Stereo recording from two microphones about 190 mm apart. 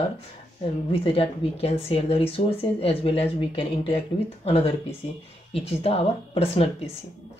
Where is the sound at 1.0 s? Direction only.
30° left (ahead or behind).